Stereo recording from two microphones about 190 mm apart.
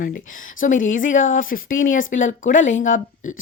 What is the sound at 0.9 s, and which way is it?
A woman's voice, 40° left (ahead or behind).